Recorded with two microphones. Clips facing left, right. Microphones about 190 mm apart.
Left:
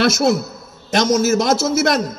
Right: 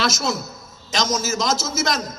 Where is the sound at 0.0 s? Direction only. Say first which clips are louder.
Left 8 dB; 60° left (ahead or behind).